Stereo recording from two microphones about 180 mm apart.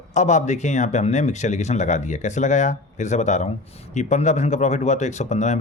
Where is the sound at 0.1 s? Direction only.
40° left (ahead or behind).